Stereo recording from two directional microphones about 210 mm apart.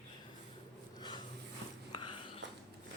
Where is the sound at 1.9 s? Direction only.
20° left (ahead or behind).